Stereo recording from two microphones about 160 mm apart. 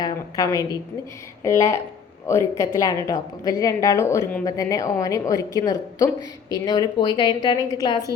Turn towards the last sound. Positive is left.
turn(degrees=25)  # may be behind; listen again after turning